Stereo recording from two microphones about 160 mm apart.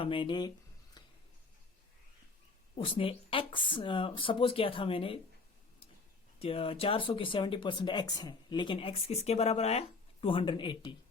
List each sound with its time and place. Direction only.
0.0 s speech: 30° left (ahead or behind)
1.0 s a sound: 25° left (ahead or behind)
2.7 s speech: 35° left (ahead or behind)
6.4 s speech: 35° left (ahead or behind)